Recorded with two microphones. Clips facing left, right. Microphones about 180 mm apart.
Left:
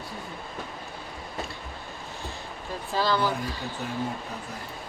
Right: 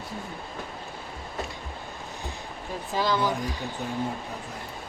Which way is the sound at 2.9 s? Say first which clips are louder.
Even; 20° right (ahead or behind).